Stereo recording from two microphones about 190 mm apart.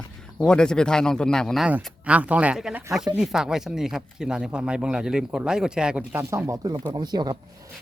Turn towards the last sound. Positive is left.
turn(degrees=-20)  # may be behind; listen again after turning